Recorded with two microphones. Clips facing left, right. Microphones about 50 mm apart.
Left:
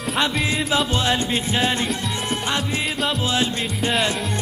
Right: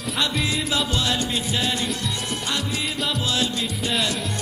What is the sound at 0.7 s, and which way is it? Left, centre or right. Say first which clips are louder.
Music: left 3 dB; left.